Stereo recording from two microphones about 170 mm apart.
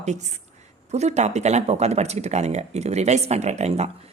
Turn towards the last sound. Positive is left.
turn(degrees=-40)  # may be behind; listen again after turning